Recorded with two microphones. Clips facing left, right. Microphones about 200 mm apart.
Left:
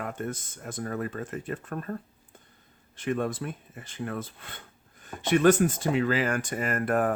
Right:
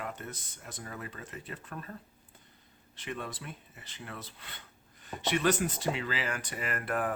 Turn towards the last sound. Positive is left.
turn(degrees=45)  # may be behind; listen again after turning